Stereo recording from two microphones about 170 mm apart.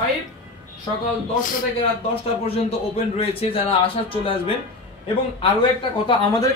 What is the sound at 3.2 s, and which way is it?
Speech, 35° left (ahead or behind).